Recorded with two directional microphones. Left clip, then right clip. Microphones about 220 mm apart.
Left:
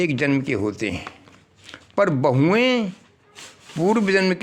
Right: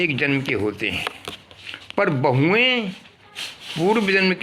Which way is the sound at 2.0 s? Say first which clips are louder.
Left 1 dB; 55° left (ahead or behind).